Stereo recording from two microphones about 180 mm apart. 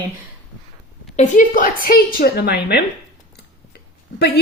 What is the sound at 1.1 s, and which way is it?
A woman's voice, 45° left (ahead or behind).